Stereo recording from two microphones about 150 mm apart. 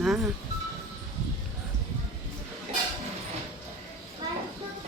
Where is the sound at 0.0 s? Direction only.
Centre (ahead or behind).